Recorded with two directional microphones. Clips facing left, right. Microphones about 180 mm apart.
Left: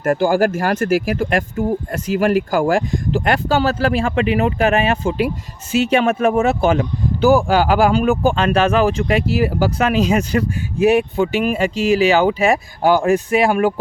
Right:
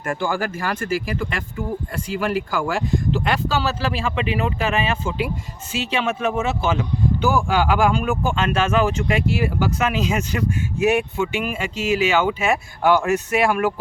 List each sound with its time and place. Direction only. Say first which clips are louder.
0.0 s speech: left 9 dB; 45° left (ahead or behind)